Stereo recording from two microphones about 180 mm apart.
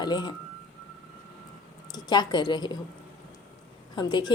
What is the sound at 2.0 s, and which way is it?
Speech, 25° left (ahead or behind).